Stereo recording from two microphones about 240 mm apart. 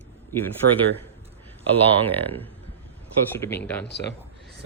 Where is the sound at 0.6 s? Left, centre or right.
Right.